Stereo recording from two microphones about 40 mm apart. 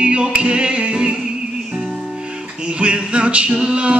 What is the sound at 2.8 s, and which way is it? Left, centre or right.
A capella, right.